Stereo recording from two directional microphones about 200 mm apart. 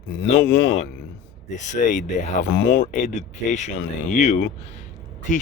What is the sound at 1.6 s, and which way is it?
Speech, 35° left (ahead or behind).